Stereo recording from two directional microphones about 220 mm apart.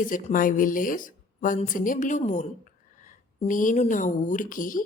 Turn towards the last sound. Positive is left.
turn(degrees=40)  # may be behind; listen again after turning